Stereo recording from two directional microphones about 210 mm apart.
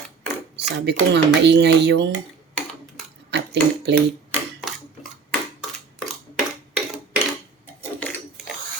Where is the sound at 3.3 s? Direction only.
55° right (ahead or behind).